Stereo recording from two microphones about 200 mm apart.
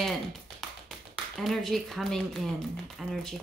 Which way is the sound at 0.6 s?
Centre (ahead or behind).